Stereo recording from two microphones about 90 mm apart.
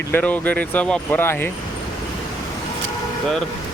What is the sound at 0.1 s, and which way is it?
Speech, 20° left (ahead or behind).